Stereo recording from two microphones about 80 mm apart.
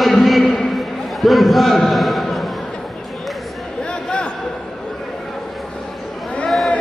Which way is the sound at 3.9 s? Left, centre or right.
Centre.